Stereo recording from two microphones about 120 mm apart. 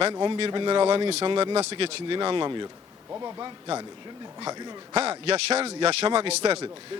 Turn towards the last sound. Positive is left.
turn(degrees=-50)  # may be behind; listen again after turning